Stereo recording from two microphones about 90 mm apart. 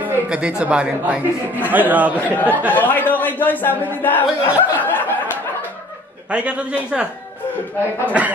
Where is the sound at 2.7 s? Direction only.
20° left (ahead or behind).